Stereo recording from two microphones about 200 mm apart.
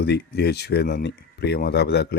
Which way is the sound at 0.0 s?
55° left (ahead or behind).